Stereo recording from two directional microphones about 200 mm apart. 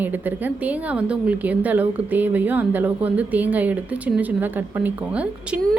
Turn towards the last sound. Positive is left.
turn(degrees=-5)  # may be behind; listen again after turning